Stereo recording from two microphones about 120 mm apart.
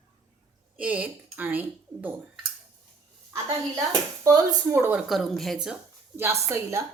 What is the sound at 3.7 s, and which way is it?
A woman's voice, 25° right (ahead or behind).